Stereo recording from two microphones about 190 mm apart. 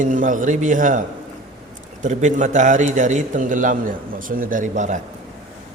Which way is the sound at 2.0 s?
40° right (ahead or behind).